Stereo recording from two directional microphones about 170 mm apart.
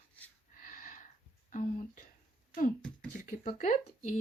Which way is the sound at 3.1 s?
50° left (ahead or behind).